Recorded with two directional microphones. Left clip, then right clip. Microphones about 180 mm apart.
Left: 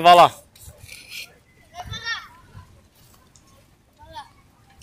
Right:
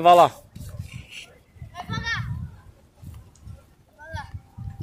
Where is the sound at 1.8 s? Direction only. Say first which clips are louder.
Right 1 dB; 20° left (ahead or behind).